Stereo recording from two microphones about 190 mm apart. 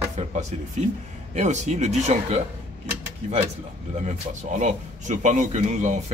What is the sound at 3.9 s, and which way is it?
Speech, 35° right (ahead or behind).